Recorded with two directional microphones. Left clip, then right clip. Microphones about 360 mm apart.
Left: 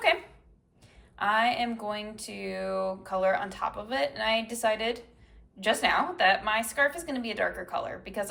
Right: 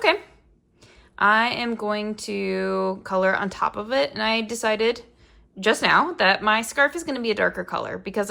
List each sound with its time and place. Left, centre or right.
1.1 s speech: centre